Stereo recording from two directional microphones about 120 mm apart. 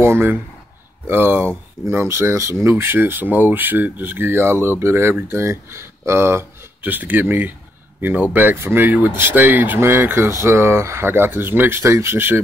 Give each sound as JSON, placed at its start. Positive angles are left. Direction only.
{"t": 0.0, "sound": "speech", "side_deg": -20}